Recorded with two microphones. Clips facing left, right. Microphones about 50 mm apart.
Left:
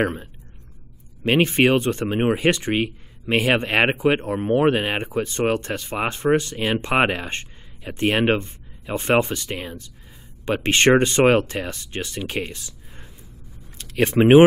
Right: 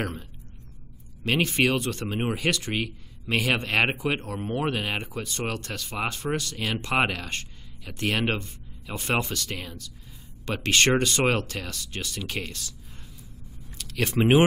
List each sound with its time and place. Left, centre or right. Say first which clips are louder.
0.0 s speech: left 9 dB; left
13.7 s speech: left 7 dB; left